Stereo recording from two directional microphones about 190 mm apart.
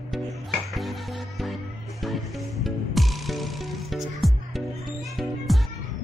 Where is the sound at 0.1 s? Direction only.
Centre (ahead or behind).